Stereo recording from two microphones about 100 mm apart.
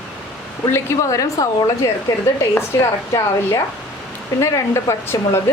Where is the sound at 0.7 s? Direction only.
30° left (ahead or behind).